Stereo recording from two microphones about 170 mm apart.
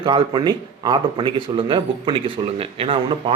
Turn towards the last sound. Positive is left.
turn(degrees=-35)  # may be behind; listen again after turning